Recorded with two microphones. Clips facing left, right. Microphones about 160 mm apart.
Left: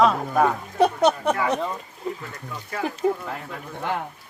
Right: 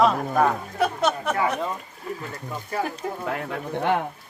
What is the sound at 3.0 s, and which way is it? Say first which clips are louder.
Speech: left 8 dB; 15° left (ahead or behind).